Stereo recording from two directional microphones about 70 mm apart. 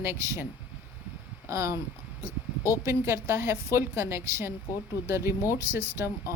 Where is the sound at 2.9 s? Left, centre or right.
Right.